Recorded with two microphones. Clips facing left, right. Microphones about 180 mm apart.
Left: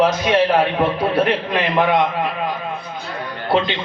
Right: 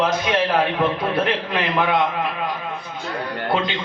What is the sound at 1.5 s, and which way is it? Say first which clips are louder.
Speech: left 3 dB; 15° left (ahead or behind).